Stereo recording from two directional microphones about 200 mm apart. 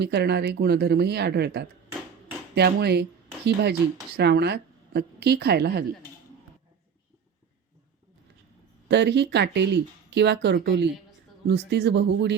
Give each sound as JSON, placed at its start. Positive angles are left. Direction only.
{"t": 0.0, "sound": "speech", "side_deg": -55}
{"t": 8.9, "sound": "speech", "side_deg": -60}